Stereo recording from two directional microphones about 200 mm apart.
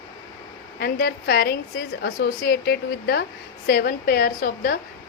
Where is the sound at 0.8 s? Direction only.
50° left (ahead or behind).